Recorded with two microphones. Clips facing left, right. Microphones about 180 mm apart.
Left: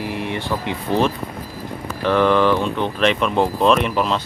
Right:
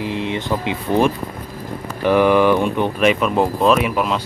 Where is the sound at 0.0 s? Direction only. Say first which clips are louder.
Right 2 dB; 20° right (ahead or behind).